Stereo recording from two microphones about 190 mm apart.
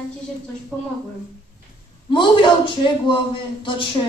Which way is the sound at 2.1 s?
25° left (ahead or behind).